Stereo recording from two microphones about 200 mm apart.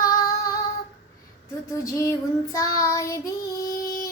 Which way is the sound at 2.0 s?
15° left (ahead or behind).